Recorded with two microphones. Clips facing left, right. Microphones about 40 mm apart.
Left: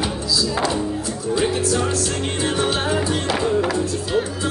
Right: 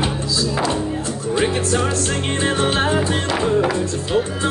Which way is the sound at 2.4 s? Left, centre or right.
Right.